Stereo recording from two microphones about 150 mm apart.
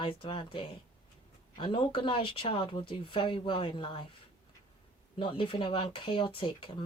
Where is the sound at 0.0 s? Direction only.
35° left (ahead or behind).